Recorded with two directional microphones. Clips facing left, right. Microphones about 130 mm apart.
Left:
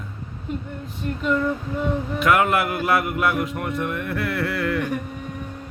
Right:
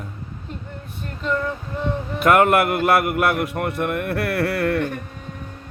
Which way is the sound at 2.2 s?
50° right (ahead or behind).